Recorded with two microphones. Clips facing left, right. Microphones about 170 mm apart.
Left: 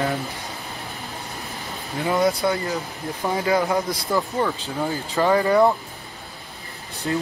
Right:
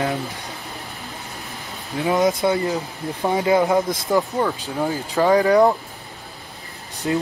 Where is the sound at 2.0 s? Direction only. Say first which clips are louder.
Right 2 dB; 15° right (ahead or behind).